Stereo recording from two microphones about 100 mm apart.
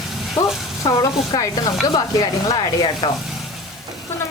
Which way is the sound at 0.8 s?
45° left (ahead or behind).